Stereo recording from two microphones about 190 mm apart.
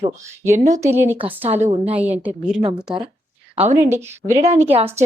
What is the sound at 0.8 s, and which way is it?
Speech, 10° right (ahead or behind).